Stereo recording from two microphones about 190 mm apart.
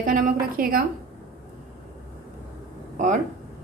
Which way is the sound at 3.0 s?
40° right (ahead or behind).